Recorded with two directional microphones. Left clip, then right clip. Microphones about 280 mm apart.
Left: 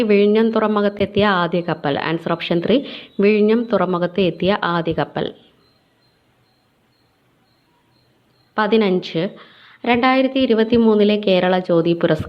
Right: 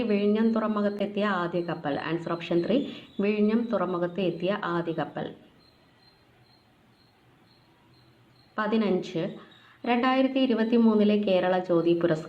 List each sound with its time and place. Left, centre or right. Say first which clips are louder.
0.0 s a woman's voice: left 11 dB; left
8.5 s a woman's voice: left 10 dB; left